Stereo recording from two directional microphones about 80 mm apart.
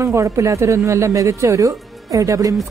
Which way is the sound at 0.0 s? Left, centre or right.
Right.